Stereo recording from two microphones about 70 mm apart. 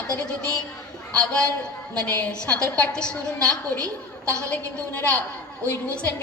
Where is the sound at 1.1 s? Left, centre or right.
Centre.